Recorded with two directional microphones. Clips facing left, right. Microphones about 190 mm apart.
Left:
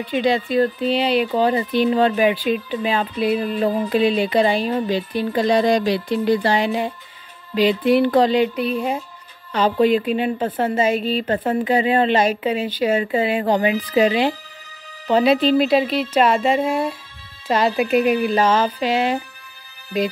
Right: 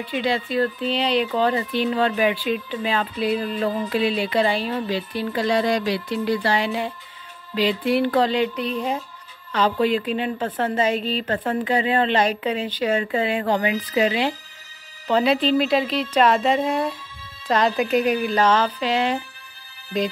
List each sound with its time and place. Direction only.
0.0 s speech: 20° left (ahead or behind)
5.9 s music: 20° left (ahead or behind)
7.5 s speech: 15° left (ahead or behind)
13.6 s music: 30° left (ahead or behind)
15.0 s speech: 10° left (ahead or behind)